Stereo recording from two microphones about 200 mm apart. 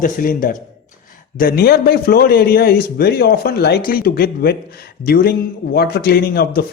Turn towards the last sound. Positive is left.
turn(degrees=50)  # may be behind; listen again after turning